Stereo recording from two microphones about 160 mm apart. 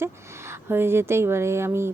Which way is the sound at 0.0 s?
15° right (ahead or behind).